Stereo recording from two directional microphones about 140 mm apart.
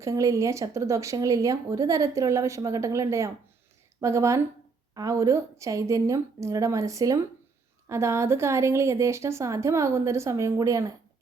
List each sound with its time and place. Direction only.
0.0 s speech: 25° right (ahead or behind)